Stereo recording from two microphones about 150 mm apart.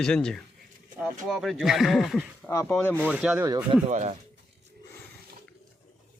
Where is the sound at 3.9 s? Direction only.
55° right (ahead or behind).